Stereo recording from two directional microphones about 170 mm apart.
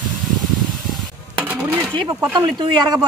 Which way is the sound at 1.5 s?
10° right (ahead or behind).